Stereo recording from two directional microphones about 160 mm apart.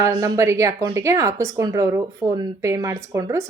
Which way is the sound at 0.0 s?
20° right (ahead or behind).